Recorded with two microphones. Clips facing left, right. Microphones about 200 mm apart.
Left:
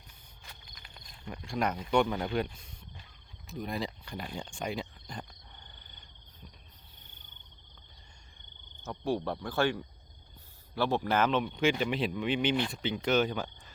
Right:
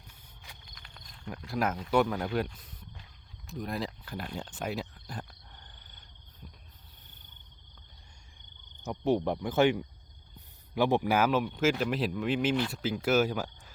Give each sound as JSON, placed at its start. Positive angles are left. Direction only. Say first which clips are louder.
{"t": 0.7, "sound": "speech", "louder": "even", "side_deg": 5}
{"t": 8.8, "sound": "speech", "louder": "right 4 dB", "side_deg": -20}